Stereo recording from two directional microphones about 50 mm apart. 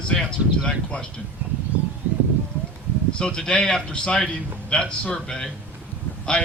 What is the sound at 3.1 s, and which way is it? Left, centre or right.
Speech, centre.